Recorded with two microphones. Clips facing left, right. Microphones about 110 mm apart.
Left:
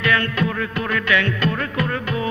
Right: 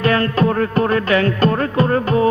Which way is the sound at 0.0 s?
35° right (ahead or behind).